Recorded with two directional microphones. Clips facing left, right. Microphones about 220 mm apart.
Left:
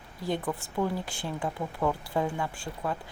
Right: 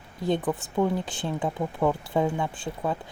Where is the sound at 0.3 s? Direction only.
20° right (ahead or behind).